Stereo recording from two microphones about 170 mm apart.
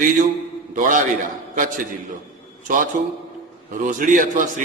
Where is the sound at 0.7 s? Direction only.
50° right (ahead or behind).